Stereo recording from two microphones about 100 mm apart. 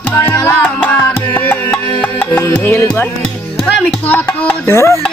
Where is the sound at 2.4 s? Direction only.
25° left (ahead or behind).